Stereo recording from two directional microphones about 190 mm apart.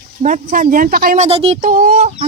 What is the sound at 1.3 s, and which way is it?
Speech, 30° right (ahead or behind).